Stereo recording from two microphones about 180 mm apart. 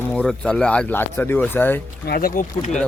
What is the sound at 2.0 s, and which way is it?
Speech, 55° left (ahead or behind).